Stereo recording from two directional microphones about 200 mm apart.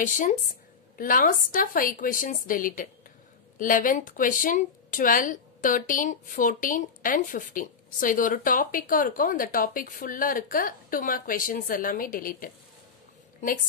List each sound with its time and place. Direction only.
0.0 s a woman's voice: 40° left (ahead or behind)